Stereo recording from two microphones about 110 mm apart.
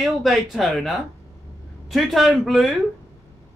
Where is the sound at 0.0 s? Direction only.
Centre (ahead or behind).